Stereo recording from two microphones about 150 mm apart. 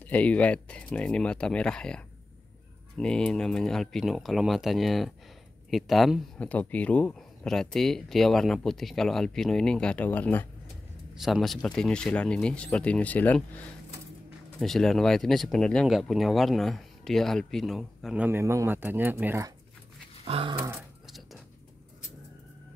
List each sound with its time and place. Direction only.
0.0 s speech: 10° left (ahead or behind)
11.1 s speech: centre (ahead or behind)
14.6 s speech: 5° left (ahead or behind); by 19.5 s 15° right (ahead or behind)
20.2 s dog: 35° right (ahead or behind)